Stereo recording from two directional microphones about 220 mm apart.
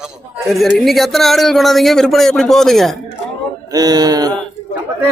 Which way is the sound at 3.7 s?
15° right (ahead or behind).